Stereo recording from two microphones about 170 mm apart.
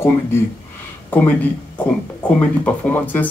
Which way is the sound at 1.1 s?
10° left (ahead or behind).